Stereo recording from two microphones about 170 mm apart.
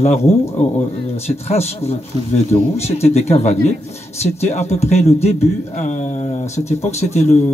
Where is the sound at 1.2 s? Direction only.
40° left (ahead or behind).